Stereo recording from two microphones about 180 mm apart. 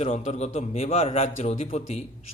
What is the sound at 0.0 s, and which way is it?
A man's voice, 40° left (ahead or behind).